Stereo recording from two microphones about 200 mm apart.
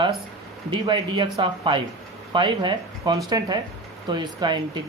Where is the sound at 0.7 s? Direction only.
25° right (ahead or behind).